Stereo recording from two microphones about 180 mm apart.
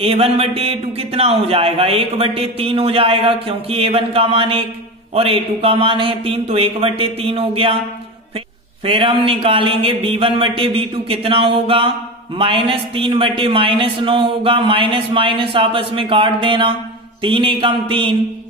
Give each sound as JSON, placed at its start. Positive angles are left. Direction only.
{"t": 0.0, "sound": "a man's voice", "side_deg": -30}
{"t": 8.8, "sound": "a man's voice", "side_deg": -30}